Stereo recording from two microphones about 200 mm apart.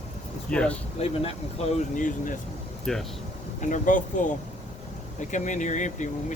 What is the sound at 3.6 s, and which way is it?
Speech, 40° left (ahead or behind).